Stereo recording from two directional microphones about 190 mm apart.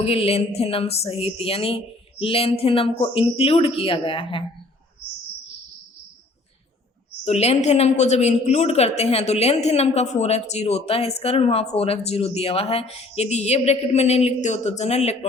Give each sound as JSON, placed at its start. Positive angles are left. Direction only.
{"t": 0.0, "sound": "speech", "side_deg": 30}
{"t": 7.3, "sound": "a woman's voice", "side_deg": 35}